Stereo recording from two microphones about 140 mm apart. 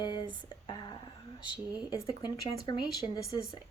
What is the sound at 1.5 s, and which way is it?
Speech, 30° left (ahead or behind).